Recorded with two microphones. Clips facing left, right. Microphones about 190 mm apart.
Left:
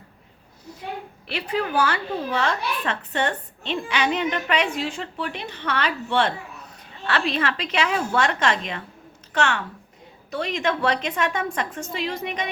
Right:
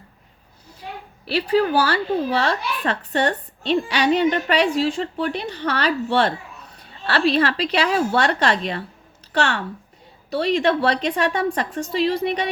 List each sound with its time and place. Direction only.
1.3 s a woman's voice: 35° right (ahead or behind)